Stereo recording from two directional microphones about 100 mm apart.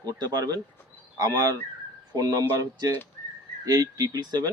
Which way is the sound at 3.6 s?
35° right (ahead or behind).